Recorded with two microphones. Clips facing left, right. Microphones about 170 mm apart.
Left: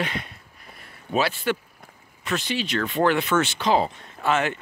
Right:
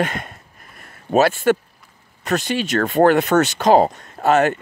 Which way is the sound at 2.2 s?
45° right (ahead or behind).